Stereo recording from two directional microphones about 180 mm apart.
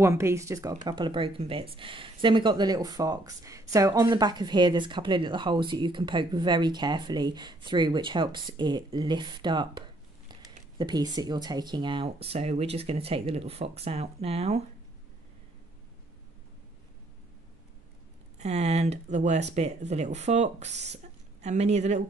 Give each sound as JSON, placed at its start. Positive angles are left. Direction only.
{"t": 0.0, "sound": "speech", "side_deg": -15}
{"t": 18.4, "sound": "speech", "side_deg": -40}